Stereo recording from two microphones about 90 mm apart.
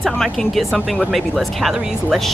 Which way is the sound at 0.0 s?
5° left (ahead or behind).